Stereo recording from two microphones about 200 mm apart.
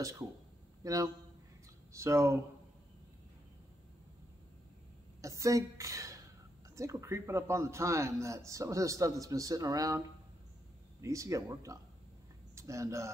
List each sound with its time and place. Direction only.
0.8 s a man's voice: 15° right (ahead or behind)
5.2 s a woman's voice: 15° right (ahead or behind)